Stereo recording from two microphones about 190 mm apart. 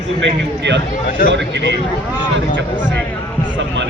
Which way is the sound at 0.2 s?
65° right (ahead or behind).